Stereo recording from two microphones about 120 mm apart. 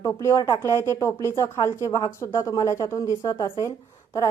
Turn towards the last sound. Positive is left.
turn(degrees=25)  # may be behind; listen again after turning